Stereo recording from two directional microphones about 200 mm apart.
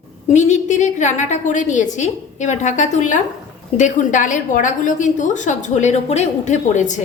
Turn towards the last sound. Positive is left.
turn(degrees=35)  # may be behind; listen again after turning